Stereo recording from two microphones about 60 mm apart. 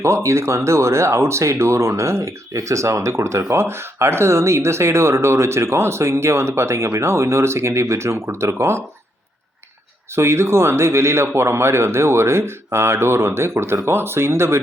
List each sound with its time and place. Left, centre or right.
0.0 s speech: right
10.2 s speech: right